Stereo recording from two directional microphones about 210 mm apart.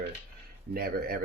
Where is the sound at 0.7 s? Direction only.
45° right (ahead or behind).